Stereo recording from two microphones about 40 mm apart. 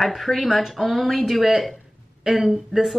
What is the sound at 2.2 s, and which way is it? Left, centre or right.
Speech, centre.